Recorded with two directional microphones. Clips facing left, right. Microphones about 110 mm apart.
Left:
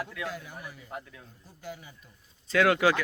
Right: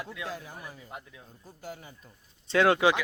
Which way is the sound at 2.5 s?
25° right (ahead or behind).